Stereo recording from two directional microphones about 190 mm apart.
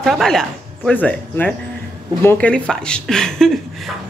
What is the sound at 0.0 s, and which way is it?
Speech, centre (ahead or behind).